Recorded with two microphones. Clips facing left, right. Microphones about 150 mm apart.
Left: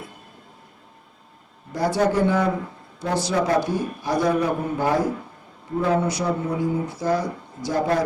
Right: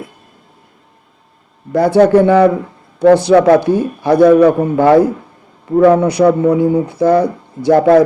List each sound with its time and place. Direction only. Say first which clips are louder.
1.7 s speech: right 12 dB; 60° right (ahead or behind)